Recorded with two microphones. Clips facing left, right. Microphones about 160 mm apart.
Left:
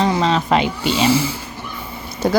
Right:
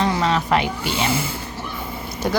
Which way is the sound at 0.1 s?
25° left (ahead or behind).